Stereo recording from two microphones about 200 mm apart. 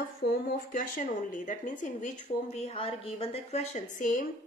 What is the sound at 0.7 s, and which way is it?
A woman's voice, 40° left (ahead or behind).